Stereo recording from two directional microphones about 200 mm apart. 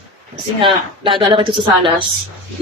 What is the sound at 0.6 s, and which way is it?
A woman's voice, 25° right (ahead or behind).